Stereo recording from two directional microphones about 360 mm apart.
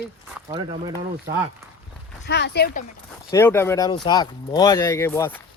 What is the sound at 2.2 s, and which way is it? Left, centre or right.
Speech, left.